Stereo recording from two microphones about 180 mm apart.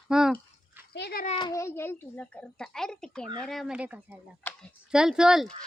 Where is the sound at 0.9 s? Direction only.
65° left (ahead or behind).